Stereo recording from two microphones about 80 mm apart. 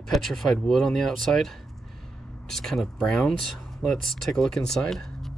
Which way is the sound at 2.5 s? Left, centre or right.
Centre.